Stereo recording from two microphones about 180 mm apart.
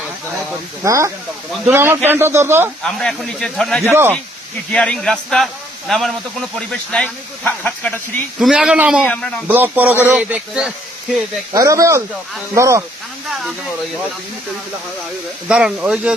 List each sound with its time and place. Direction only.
0.9 s speech: 15° right (ahead or behind)
2.8 s speech: centre (ahead or behind)
8.4 s speech: 5° right (ahead or behind)
9.5 s speech: 10° right (ahead or behind)
11.5 s speech: 15° right (ahead or behind)
15.4 s speech: 5° right (ahead or behind)